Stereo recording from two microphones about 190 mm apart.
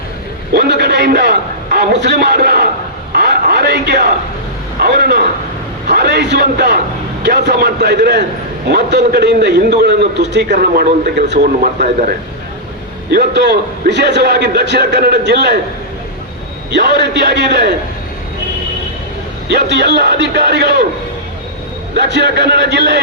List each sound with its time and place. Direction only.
0.5 s a man's voice: 60° right (ahead or behind)
3.1 s a sound: 55° right (ahead or behind)
4.8 s a man's voice: 55° right (ahead or behind)
10.5 s a man's voice: 45° right (ahead or behind)
13.1 s a man's voice: 60° right (ahead or behind)
16.7 s a man's voice: 65° right (ahead or behind)
19.5 s a man's voice: 65° right (ahead or behind)
21.9 s a man's voice: 65° right (ahead or behind)